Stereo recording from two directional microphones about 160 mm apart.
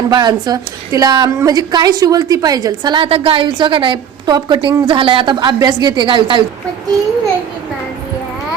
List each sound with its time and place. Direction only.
0.1 s a woman's voice: 25° right (ahead or behind)